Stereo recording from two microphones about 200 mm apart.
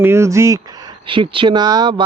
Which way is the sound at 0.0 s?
15° right (ahead or behind).